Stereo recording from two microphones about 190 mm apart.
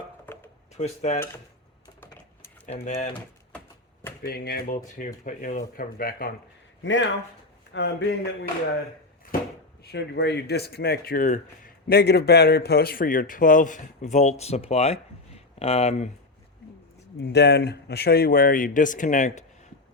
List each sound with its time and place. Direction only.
0.8 s speech: 35° left (ahead or behind)
2.7 s speech: 40° left (ahead or behind)
4.2 s speech: 55° left (ahead or behind)
6.8 s speech: 75° left (ahead or behind)
9.8 s speech: 60° left (ahead or behind); by 16.0 s 35° left (ahead or behind)
17.2 s speech: 60° left (ahead or behind); by 19.3 s 40° left (ahead or behind)